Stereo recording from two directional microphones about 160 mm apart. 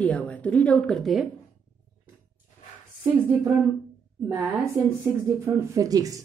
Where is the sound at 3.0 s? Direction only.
10° right (ahead or behind).